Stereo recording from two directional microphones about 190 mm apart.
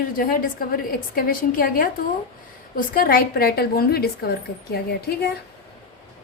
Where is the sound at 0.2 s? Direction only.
50° left (ahead or behind).